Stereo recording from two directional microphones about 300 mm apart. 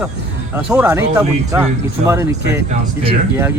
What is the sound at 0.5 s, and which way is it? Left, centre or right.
Speech, centre.